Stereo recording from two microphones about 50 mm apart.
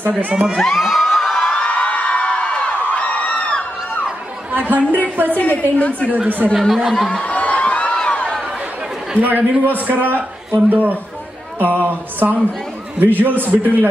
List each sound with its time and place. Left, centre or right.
0.3 s speech: right
0.6 s crowd: centre
1.4 s a sound: left
4.5 s chatter: right
5.1 s a man's voice: right
5.4 s a woman's voice: left
6.0 s a man's voice: right
6.7 s speech: centre
7.1 s a sound: left
9.1 s a man's voice: right